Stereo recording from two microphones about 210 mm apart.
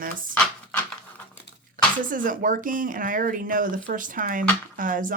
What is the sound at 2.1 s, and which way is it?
Speech, 40° right (ahead or behind).